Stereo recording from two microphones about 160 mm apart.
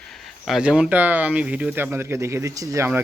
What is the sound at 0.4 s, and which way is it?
Speech, 5° right (ahead or behind).